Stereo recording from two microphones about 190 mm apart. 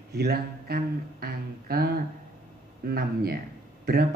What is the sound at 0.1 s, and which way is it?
Speech, 55° right (ahead or behind).